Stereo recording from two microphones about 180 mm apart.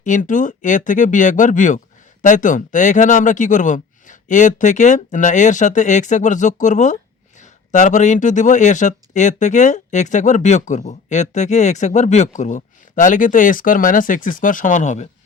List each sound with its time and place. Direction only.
0.0 s speech: 45° left (ahead or behind)